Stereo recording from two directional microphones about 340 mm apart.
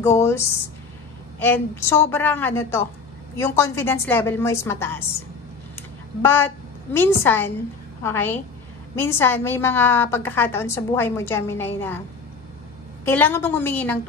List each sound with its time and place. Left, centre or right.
0.2 s a woman's voice: centre
13.0 s a woman's voice: centre